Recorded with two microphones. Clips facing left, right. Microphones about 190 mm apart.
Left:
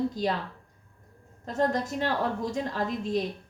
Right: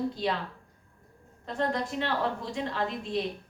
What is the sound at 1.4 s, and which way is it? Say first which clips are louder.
A woman's voice: left 3 dB; 45° left (ahead or behind).